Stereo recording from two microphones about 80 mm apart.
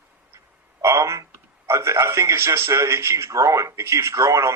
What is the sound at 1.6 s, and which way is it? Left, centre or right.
Speech, right.